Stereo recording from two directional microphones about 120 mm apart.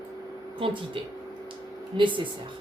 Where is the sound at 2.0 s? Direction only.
45° right (ahead or behind).